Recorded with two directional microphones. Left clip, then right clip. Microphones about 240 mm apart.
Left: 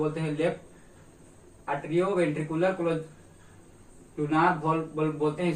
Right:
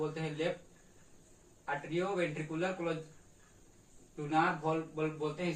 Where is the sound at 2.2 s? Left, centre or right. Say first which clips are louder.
Left 9 dB; centre.